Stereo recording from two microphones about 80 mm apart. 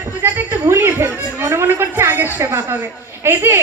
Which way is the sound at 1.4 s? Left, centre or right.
Right.